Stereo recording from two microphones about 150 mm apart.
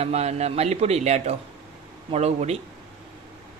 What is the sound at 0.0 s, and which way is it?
Speech, 45° right (ahead or behind).